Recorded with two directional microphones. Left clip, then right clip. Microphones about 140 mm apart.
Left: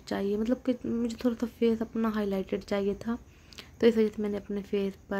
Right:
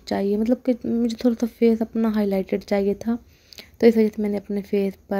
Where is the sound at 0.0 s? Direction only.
30° right (ahead or behind).